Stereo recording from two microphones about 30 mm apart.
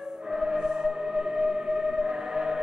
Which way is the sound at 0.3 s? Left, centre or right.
Centre.